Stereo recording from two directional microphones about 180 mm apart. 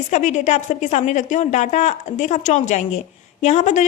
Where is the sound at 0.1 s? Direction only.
40° left (ahead or behind).